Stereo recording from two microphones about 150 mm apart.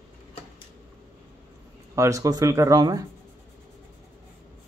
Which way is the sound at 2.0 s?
20° right (ahead or behind).